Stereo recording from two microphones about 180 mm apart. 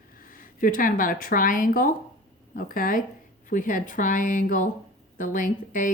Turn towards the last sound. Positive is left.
turn(degrees=45)  # may be behind; listen again after turning